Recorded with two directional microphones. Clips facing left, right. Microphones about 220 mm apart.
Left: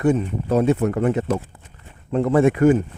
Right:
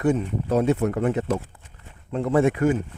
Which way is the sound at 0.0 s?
80° left.